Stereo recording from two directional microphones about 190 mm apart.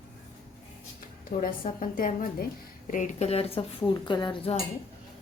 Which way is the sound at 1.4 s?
45° left (ahead or behind).